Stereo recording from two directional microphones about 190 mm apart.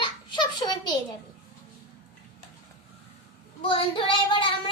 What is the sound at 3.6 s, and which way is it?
Speech, 25° left (ahead or behind).